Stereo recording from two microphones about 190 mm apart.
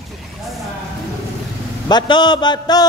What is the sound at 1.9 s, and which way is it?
Speech, 20° left (ahead or behind).